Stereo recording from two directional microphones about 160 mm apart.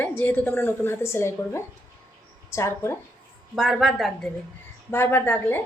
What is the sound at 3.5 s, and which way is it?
Speech, centre (ahead or behind).